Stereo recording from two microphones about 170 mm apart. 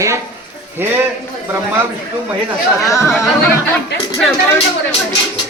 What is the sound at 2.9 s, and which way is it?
Speech, 20° left (ahead or behind).